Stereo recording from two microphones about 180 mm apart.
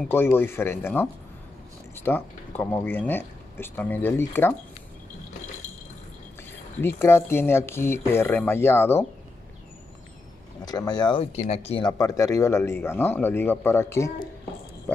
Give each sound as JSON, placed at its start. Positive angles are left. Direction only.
{"t": 0.0, "sound": "speech", "side_deg": 10}
{"t": 6.8, "sound": "speech", "side_deg": 15}
{"t": 10.6, "sound": "speech", "side_deg": 20}
{"t": 12.0, "sound": "speech", "side_deg": 20}